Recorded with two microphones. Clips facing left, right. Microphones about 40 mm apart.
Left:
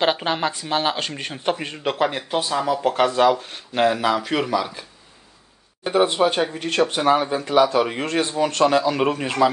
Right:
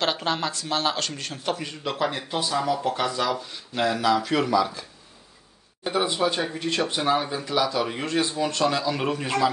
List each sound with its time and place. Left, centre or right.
0.0 s speech: left
2.8 s speech: left
5.9 s speech: left
6.9 s speech: left